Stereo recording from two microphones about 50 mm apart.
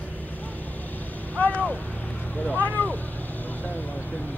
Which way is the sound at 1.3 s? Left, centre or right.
Left.